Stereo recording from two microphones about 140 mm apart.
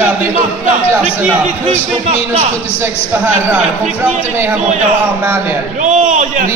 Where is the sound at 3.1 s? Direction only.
10° right (ahead or behind).